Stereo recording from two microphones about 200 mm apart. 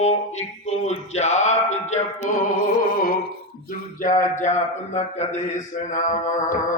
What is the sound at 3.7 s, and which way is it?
A man's voice, 40° left (ahead or behind).